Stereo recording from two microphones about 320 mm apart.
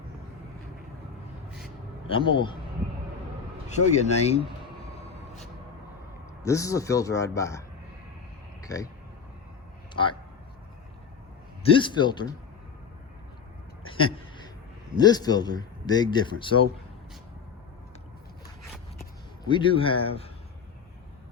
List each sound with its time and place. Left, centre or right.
2.1 s a man's voice: centre
3.7 s speech: left
6.4 s a man's voice: centre
8.6 s speech: centre
9.9 s speech: centre
11.7 s a man's voice: centre
14.9 s a man's voice: centre
19.5 s a man's voice: centre